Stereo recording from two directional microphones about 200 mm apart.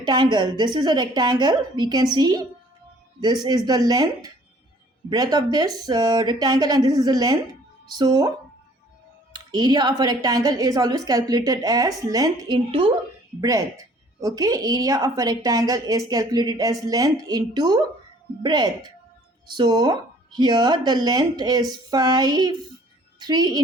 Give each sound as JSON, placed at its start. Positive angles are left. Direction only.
{"t": 0.0, "sound": "a woman's voice", "side_deg": -20}
{"t": 9.3, "sound": "a woman's voice", "side_deg": -20}